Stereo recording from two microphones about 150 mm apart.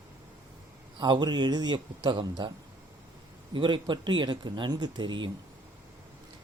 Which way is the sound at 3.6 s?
35° right (ahead or behind).